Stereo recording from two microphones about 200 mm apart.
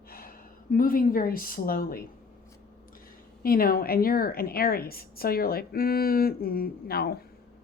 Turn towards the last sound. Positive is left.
turn(degrees=50)  # may be behind; listen again after turning